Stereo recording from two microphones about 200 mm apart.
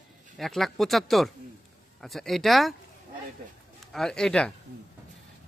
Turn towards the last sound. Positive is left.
turn(degrees=5)  # may be behind; listen again after turning